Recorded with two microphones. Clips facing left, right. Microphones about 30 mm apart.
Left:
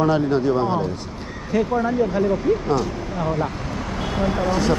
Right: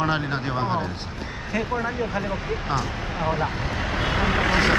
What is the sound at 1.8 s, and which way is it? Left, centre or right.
Speech, centre.